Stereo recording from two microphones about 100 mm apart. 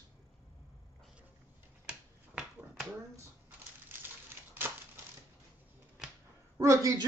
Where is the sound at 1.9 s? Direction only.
10° right (ahead or behind).